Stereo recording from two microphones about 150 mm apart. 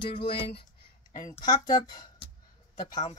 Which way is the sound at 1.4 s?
30° left (ahead or behind).